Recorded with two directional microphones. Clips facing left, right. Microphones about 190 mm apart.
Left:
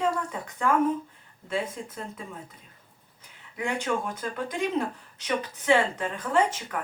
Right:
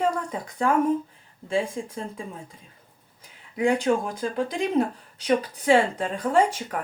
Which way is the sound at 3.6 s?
35° right (ahead or behind).